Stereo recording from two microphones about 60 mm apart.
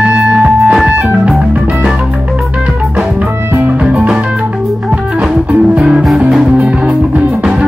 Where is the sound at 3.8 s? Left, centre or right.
Centre.